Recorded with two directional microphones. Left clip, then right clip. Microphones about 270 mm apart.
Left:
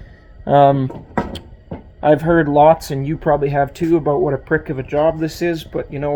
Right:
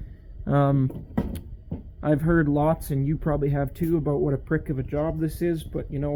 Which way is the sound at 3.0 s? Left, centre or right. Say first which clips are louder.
Left 10 dB; centre.